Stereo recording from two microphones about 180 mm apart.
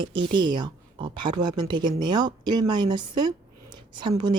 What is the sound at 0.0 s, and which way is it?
Speech, 25° right (ahead or behind).